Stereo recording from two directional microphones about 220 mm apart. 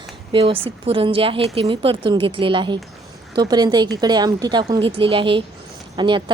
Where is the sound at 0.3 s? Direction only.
25° right (ahead or behind).